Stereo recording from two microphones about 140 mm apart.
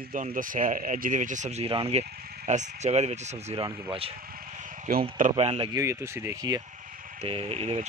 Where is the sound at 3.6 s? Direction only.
35° right (ahead or behind).